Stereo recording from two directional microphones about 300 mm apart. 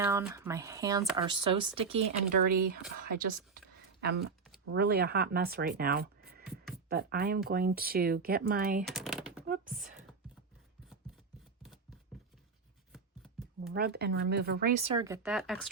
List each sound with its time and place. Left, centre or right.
0.0 s speech: centre
2.4 s speech: right
8.9 s a sound: centre
9.5 s speech: right
12.9 s a sound: centre
13.7 s speech: right
14.8 s speech: centre